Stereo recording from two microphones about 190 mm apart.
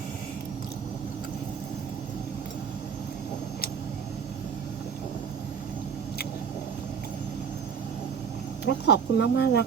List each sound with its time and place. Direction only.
8.6 s speech: 65° left (ahead or behind)